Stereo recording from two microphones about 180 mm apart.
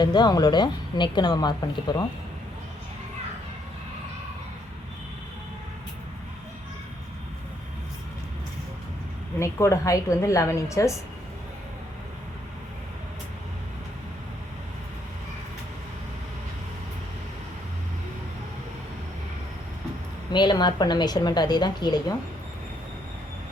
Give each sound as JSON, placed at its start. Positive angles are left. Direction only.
{"t": 0.0, "sound": "speech", "side_deg": 25}
{"t": 9.4, "sound": "a woman's voice", "side_deg": 15}
{"t": 20.3, "sound": "speech", "side_deg": 25}